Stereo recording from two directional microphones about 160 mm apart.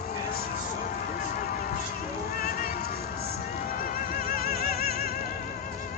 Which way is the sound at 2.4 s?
65° left (ahead or behind).